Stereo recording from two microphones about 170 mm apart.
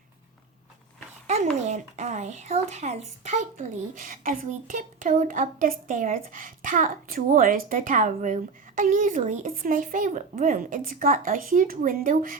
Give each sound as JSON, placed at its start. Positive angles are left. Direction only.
{"t": 1.6, "sound": "a woman's voice", "side_deg": -40}